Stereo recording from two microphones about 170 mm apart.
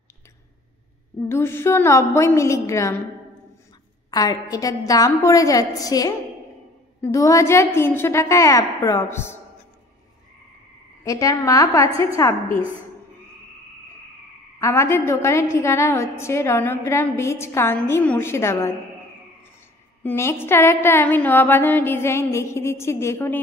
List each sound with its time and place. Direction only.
1.3 s a woman's voice: 15° left (ahead or behind)
4.1 s a woman's voice: 20° left (ahead or behind)
11.1 s a woman's voice: 20° left (ahead or behind)
14.6 s a woman's voice: 15° left (ahead or behind)
20.0 s a woman's voice: 15° left (ahead or behind)